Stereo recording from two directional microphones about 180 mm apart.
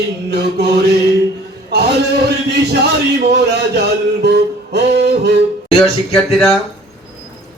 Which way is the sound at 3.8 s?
65° right (ahead or behind).